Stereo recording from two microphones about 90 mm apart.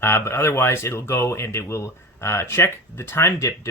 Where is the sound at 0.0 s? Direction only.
30° left (ahead or behind).